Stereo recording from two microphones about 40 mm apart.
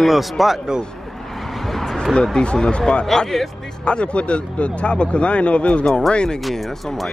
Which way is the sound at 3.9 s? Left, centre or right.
Left.